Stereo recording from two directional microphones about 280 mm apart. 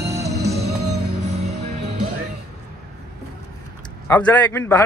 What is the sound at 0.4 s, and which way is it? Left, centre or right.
Music, right.